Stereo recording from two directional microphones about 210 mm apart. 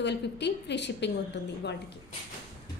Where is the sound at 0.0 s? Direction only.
55° left (ahead or behind).